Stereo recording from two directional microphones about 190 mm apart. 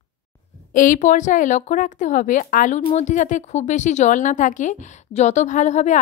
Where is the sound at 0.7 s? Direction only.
45° left (ahead or behind).